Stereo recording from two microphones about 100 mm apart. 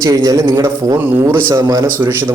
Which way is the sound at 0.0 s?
35° right (ahead or behind).